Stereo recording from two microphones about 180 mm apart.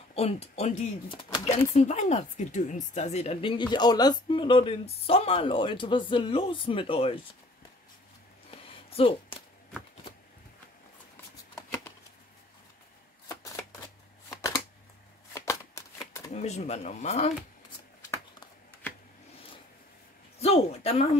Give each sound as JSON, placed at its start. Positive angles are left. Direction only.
{"t": 0.1, "sound": "speech", "side_deg": 35}
{"t": 1.8, "sound": "a woman's voice", "side_deg": 40}
{"t": 8.5, "sound": "a sound", "side_deg": 30}
{"t": 11.5, "sound": "shuffling cards", "side_deg": 15}
{"t": 13.3, "sound": "shuffling cards", "side_deg": 20}
{"t": 16.3, "sound": "speech", "side_deg": 35}
{"t": 18.1, "sound": "shuffling cards", "side_deg": 10}
{"t": 20.3, "sound": "speech", "side_deg": 35}